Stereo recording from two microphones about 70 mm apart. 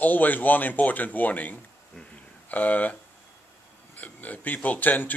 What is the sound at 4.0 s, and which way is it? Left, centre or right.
A man's voice, left.